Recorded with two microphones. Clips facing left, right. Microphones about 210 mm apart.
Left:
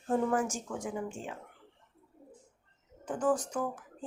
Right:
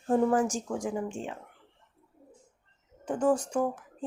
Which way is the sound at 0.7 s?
45° right (ahead or behind).